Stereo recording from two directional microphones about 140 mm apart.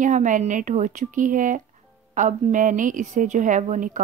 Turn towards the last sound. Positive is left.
turn(degrees=-65)  # may be behind; listen again after turning